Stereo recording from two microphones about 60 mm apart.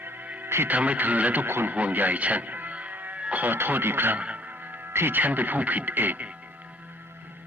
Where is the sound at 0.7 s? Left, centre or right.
Right.